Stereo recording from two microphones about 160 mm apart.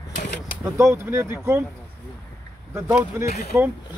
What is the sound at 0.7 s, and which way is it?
Speech, 15° right (ahead or behind).